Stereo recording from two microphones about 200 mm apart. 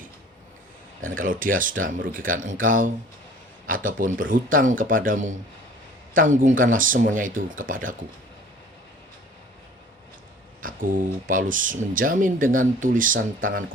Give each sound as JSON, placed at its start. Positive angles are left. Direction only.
{"t": 1.1, "sound": "speech", "side_deg": -45}
{"t": 10.6, "sound": "speech", "side_deg": -45}